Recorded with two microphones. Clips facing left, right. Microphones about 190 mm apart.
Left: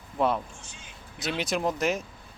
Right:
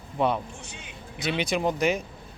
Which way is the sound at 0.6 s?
65° right (ahead or behind).